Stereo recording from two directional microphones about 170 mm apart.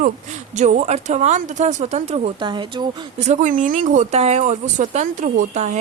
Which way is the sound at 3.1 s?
40° right (ahead or behind).